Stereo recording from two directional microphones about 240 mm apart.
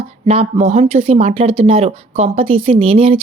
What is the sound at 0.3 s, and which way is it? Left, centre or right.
Speech, right.